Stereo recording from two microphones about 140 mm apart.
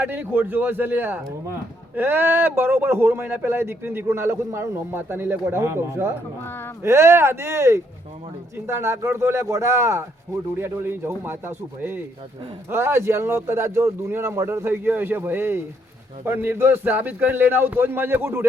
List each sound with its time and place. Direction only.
0.0 s speech: 15° right (ahead or behind)